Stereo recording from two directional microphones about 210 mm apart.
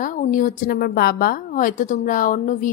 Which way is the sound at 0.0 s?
40° left (ahead or behind).